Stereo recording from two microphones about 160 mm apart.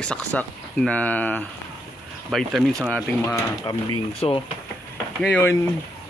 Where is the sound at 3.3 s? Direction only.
25° left (ahead or behind).